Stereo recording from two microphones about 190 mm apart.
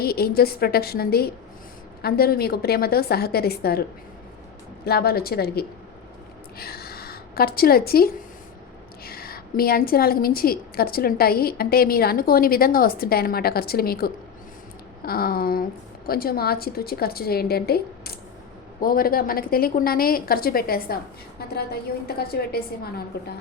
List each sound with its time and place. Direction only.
0.0 s a woman's voice: 55° left (ahead or behind)
4.9 s a woman's voice: 55° left (ahead or behind)